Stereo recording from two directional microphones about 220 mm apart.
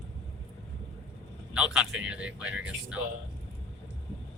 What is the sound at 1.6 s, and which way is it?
Speech, 5° right (ahead or behind).